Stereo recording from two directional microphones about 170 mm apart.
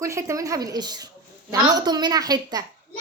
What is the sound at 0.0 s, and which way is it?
A woman's voice, 15° right (ahead or behind).